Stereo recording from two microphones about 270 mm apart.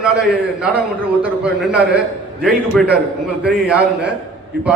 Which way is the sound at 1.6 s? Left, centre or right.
Centre.